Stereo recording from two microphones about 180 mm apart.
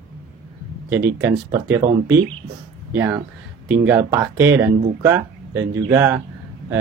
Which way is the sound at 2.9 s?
15° right (ahead or behind).